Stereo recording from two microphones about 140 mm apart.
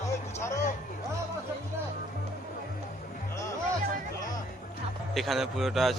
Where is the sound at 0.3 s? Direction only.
20° left (ahead or behind).